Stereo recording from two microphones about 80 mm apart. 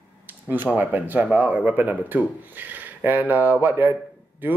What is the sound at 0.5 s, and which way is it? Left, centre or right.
Speech, right.